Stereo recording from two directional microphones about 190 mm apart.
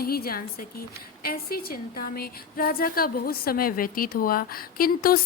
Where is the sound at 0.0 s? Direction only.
50° left (ahead or behind).